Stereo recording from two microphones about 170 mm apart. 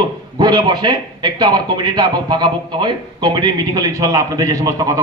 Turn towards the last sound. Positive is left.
turn(degrees=-20)  # may be behind; listen again after turning